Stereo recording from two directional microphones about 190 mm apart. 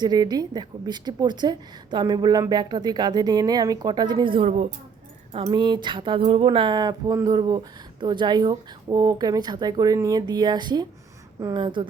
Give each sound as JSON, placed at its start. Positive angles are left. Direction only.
{"t": 0.0, "sound": "a woman's voice", "side_deg": -20}